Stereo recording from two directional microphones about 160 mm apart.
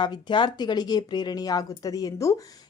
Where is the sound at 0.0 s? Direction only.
30° left (ahead or behind).